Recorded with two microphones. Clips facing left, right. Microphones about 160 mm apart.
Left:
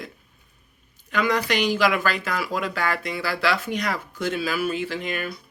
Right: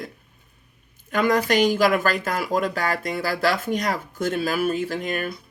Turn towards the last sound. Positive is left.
turn(degrees=-45)  # may be behind; listen again after turning